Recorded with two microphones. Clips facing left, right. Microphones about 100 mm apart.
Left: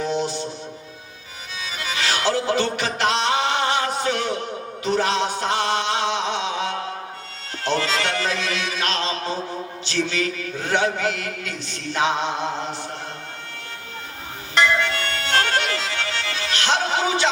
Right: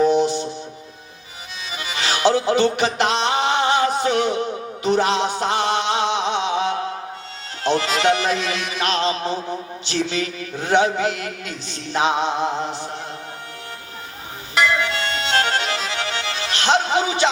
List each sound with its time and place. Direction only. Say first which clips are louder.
0.1 s music: right 6 dB; 20° right (ahead or behind)
1.7 s music: right 1 dB; 20° right (ahead or behind)
7.6 s mantra: right 4 dB; 20° right (ahead or behind)
14.5 s music: even; 5° right (ahead or behind)
14.8 s accordion: right 2 dB; 20° right (ahead or behind)